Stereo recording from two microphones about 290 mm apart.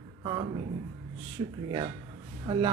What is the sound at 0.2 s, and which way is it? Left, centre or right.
A man's voice, centre.